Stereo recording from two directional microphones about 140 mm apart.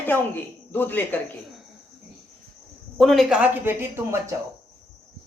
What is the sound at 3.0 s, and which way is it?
Speech, centre (ahead or behind).